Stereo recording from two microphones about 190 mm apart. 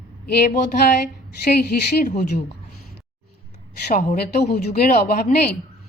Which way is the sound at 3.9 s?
50° left (ahead or behind).